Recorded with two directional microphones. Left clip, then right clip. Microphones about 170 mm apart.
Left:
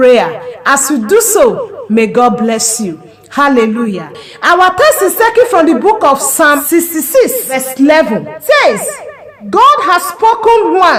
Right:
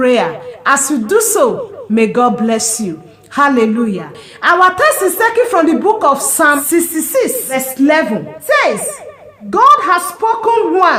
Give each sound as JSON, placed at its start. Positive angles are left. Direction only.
{"t": 0.0, "sound": "a woman's voice", "side_deg": 45}